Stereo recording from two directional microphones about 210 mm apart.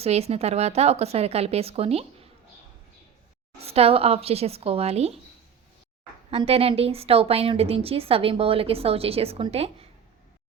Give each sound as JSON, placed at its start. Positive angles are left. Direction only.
{"t": 0.0, "sound": "a woman's voice", "side_deg": -30}
{"t": 3.6, "sound": "a woman's voice", "side_deg": -30}
{"t": 6.3, "sound": "a woman's voice", "side_deg": -30}